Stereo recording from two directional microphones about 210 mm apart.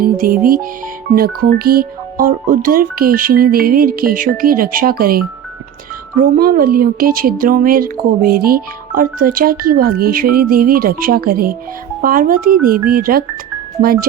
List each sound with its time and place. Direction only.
0.0 s a woman's voice: 45° right (ahead or behind)